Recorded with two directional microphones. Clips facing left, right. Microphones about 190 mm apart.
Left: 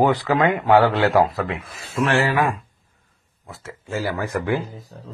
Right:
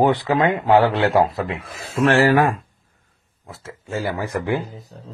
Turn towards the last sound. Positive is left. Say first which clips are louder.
# even
turn(degrees=-20)  # may be behind; listen again after turning